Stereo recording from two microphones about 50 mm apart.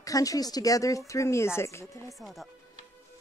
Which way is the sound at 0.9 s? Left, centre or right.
Left.